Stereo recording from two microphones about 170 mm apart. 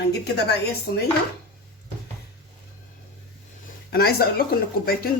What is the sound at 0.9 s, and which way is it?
Speech, 65° left (ahead or behind).